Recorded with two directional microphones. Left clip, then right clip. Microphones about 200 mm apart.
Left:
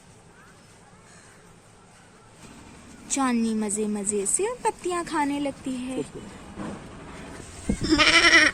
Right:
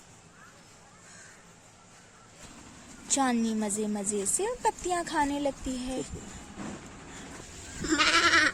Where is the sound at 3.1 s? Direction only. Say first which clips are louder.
Left 2 dB; 25° right (ahead or behind).